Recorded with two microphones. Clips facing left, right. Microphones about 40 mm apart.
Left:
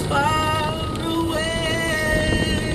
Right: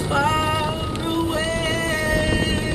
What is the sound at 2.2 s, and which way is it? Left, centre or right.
Music, right.